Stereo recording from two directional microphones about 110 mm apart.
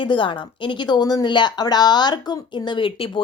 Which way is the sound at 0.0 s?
45° left (ahead or behind).